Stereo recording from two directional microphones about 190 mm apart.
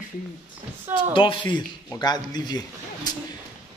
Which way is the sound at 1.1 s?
25° left (ahead or behind).